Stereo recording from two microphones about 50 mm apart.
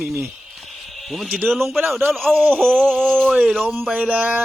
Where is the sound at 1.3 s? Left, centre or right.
Centre.